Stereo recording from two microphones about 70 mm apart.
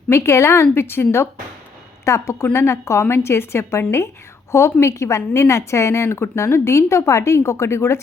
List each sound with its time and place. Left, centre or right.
0.1 s a woman's voice: left